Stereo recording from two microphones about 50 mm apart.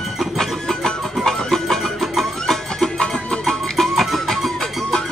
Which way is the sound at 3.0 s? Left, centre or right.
Centre.